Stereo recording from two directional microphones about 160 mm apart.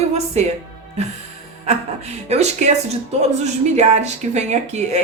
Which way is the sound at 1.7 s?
45° right (ahead or behind).